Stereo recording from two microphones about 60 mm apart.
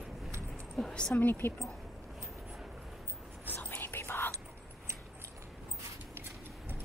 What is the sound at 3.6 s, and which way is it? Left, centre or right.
Whispering, left.